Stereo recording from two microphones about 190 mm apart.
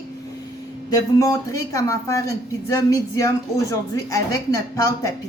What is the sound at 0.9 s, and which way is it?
A woman's voice, 20° left (ahead or behind).